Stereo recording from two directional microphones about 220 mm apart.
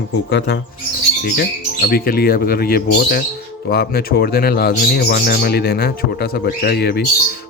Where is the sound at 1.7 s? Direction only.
45° left (ahead or behind).